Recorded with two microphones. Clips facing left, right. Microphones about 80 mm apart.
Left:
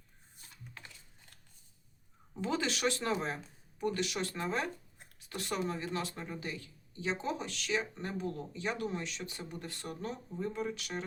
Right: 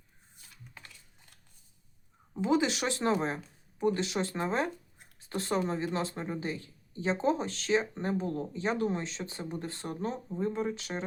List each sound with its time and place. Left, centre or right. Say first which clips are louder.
2.3 s speech: right 7 dB; centre